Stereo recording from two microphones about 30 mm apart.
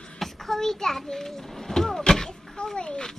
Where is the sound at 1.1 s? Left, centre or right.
Centre.